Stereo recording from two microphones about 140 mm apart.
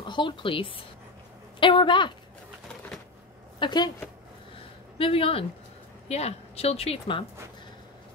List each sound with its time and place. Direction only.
0.0 s a woman's voice: 35° left (ahead or behind)
3.5 s a woman's voice: 30° left (ahead or behind)
4.9 s a woman's voice: 40° left (ahead or behind)